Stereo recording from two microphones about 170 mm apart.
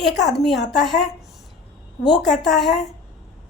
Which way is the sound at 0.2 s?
90° left.